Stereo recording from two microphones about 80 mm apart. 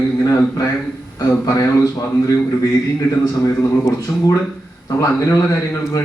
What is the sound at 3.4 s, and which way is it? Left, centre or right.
A man's voice, left.